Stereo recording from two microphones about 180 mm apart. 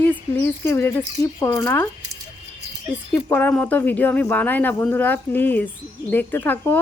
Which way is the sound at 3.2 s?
10° left (ahead or behind).